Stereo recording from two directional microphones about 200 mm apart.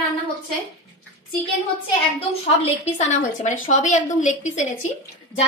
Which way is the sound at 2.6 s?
35° left (ahead or behind).